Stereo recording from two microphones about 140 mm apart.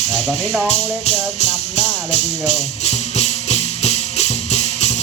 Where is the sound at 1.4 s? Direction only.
55° left (ahead or behind).